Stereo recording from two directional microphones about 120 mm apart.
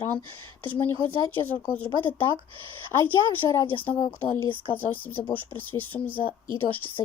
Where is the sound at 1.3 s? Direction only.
15° left (ahead or behind).